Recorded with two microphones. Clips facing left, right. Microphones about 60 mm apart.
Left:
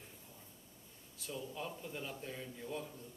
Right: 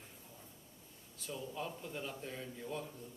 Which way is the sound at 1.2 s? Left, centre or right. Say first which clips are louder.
Right 1 dB; centre.